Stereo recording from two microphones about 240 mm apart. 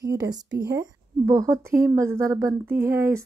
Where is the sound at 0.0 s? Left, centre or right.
Centre.